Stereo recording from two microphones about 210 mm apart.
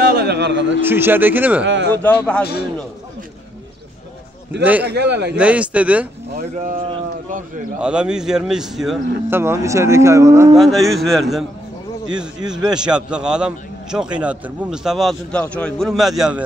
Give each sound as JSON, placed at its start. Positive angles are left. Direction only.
{"t": 0.0, "sound": "a sound", "side_deg": -50}
{"t": 0.8, "sound": "speech", "side_deg": -10}
{"t": 1.6, "sound": "speech", "side_deg": -55}
{"t": 1.9, "sound": "a man's voice", "side_deg": 5}
{"t": 4.8, "sound": "a man's voice", "side_deg": -55}
{"t": 5.3, "sound": "speech", "side_deg": -5}
{"t": 7.8, "sound": "a man's voice", "side_deg": -5}
{"t": 9.4, "sound": "speech", "side_deg": -15}
{"t": 10.5, "sound": "a man's voice", "side_deg": 0}